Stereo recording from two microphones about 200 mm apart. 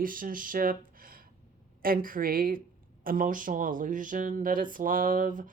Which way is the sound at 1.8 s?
45° right (ahead or behind).